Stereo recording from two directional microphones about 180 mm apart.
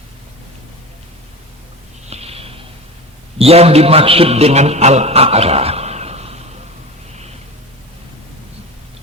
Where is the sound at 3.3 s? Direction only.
35° right (ahead or behind).